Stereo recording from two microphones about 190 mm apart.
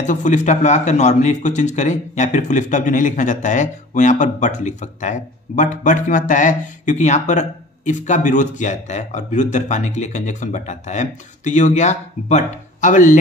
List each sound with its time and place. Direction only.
0.0 s a man's voice: 40° left (ahead or behind)